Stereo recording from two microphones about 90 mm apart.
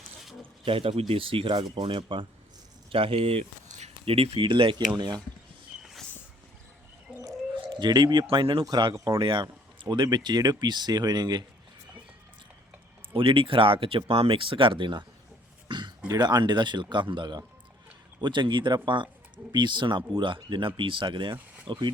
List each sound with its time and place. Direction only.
0.6 s speech: 85° right; by 2.2 s 70° right (ahead or behind)
2.9 s speech: 90° right; by 5.1 s 55° right (ahead or behind)
5.8 s a sound: centre (ahead or behind)
7.5 s speech: 60° right (ahead or behind)
8.3 s speech: 75° right (ahead or behind)
8.7 s speech: 45° right (ahead or behind)
9.1 s speech: 70° right (ahead or behind); by 11.4 s 50° right (ahead or behind)
13.1 s speech: 75° right (ahead or behind)
15.7 s a sound: 60° right (ahead or behind)
16.0 s speech: 50° right (ahead or behind); by 21.8 s 65° right (ahead or behind)